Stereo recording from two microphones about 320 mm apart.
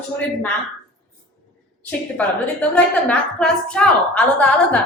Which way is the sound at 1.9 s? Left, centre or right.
Centre.